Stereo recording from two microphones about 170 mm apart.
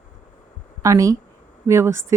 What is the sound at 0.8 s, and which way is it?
Speech, 20° right (ahead or behind).